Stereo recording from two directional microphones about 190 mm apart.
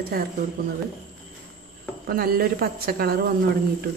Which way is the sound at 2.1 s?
50° right (ahead or behind).